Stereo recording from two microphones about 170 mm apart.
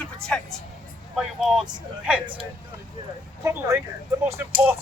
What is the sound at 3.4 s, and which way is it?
Speech, 15° right (ahead or behind).